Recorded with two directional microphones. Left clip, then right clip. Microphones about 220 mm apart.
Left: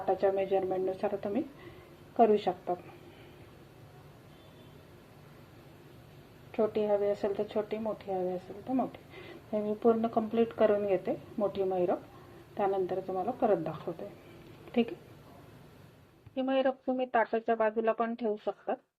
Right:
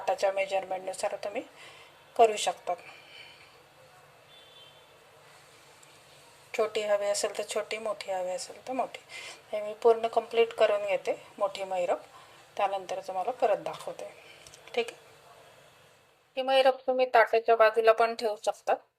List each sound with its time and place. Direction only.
0.0 s speech: 20° right (ahead or behind)
6.5 s speech: 25° right (ahead or behind)
9.5 s speech: 20° right (ahead or behind)
16.3 s speech: 10° right (ahead or behind)